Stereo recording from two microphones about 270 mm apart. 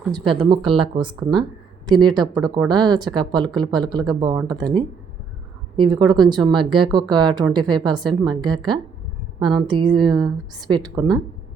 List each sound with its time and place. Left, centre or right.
0.4 s speech: centre